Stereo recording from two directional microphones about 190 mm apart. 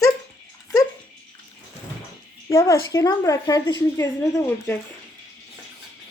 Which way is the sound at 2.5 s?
15° left (ahead or behind).